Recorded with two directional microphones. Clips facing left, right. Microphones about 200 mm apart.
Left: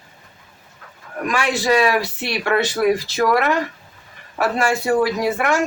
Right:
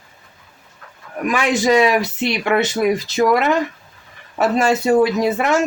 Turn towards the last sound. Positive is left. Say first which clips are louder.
# right 2 dB
turn(degrees=-20)  # may be behind; listen again after turning